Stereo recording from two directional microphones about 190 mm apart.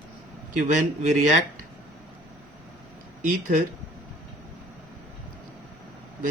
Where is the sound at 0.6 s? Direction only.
40° right (ahead or behind).